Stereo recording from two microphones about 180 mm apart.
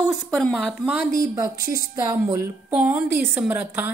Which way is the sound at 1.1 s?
20° right (ahead or behind).